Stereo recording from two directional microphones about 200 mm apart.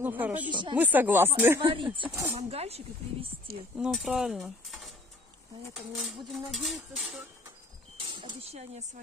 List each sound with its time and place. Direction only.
0.0 s speech: 10° right (ahead or behind)
0.5 s speech: 25° right (ahead or behind)
0.7 s speech: 10° right (ahead or behind)
1.6 s speech: 25° right (ahead or behind)
3.7 s speech: 5° right (ahead or behind)
8.0 s speech: 25° right (ahead or behind)